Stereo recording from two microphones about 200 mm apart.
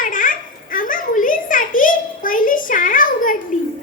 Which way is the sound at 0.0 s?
40° left (ahead or behind).